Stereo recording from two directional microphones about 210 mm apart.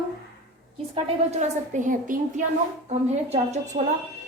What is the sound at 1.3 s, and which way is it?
A woman's voice, 35° right (ahead or behind).